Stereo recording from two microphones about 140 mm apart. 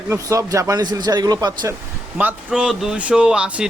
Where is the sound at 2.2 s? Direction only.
10° right (ahead or behind).